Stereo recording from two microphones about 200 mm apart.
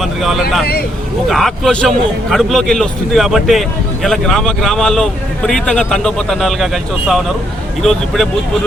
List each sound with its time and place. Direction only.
0.0 s speech: centre (ahead or behind)
0.6 s speech: 50° left (ahead or behind)
1.3 s a man's voice: centre (ahead or behind)
7.8 s a man's voice: centre (ahead or behind)